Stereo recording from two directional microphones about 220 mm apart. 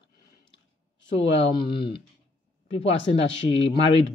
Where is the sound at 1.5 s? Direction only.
25° left (ahead or behind).